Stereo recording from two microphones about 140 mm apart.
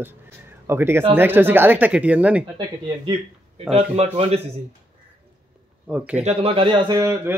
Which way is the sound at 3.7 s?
45° right (ahead or behind).